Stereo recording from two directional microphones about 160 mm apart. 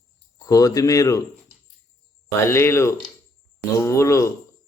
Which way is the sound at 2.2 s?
15° left (ahead or behind).